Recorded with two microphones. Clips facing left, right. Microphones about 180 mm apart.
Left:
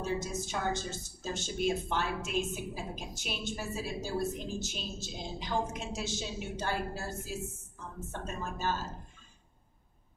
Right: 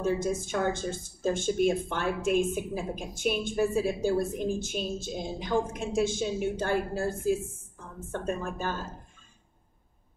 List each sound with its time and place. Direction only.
0.0 s a woman's voice: 55° right (ahead or behind)